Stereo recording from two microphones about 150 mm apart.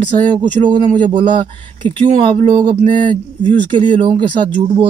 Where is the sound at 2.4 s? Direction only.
50° right (ahead or behind).